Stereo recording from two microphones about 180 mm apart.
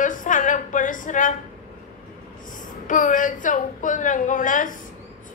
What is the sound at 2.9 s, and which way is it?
A woman's voice, 45° left (ahead or behind).